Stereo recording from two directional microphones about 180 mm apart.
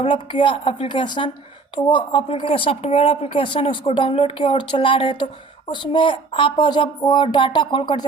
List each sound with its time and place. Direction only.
0.0 s speech: 30° left (ahead or behind)